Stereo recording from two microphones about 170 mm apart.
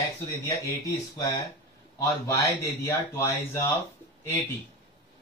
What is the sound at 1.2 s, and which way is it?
Speech, 20° left (ahead or behind).